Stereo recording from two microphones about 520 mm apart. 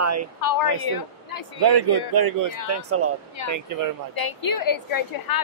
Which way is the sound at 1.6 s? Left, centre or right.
Right.